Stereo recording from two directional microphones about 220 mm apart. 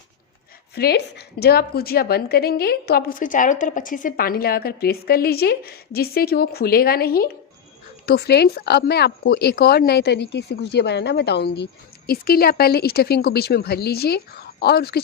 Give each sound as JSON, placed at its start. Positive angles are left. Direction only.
{"t": 0.8, "sound": "a woman's voice", "side_deg": 45}